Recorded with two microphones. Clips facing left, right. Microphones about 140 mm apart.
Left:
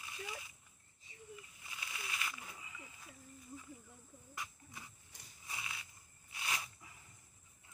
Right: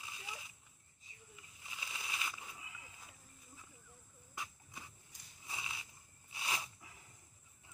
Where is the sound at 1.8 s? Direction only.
15° right (ahead or behind).